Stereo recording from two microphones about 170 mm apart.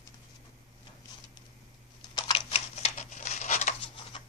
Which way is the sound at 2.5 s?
40° left (ahead or behind).